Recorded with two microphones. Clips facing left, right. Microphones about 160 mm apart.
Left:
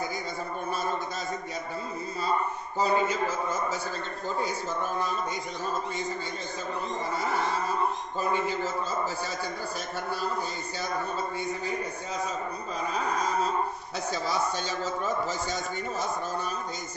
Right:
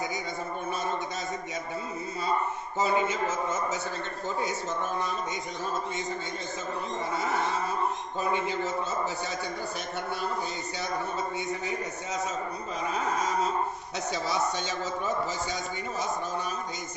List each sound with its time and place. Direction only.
2.8 s a man's voice: 20° right (ahead or behind)
8.3 s a man's voice: 20° right (ahead or behind)
14.1 s a man's voice: 20° right (ahead or behind)